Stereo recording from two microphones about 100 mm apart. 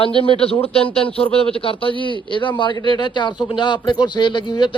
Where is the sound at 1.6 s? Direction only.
65° left (ahead or behind).